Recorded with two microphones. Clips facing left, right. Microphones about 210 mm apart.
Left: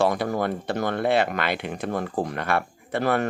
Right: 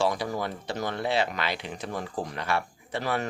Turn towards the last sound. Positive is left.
turn(degrees=55)  # may be behind; listen again after turning